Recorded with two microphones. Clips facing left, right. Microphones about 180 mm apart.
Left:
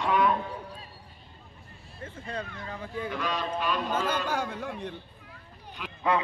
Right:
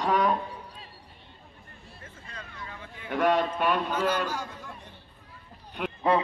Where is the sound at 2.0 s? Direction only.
35° left (ahead or behind).